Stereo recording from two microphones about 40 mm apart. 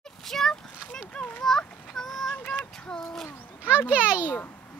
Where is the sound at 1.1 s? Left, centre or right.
Left.